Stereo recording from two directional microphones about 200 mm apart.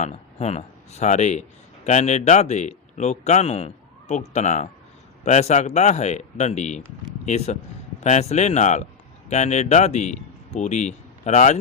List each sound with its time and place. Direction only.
0.0 s speech: 35° left (ahead or behind)